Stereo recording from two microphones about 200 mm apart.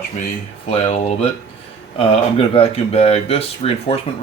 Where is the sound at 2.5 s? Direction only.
30° left (ahead or behind).